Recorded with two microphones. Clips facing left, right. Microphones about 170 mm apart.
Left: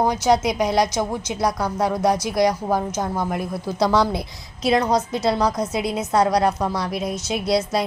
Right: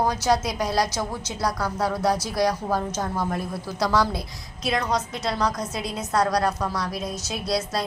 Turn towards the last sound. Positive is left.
turn(degrees=25)  # may be behind; listen again after turning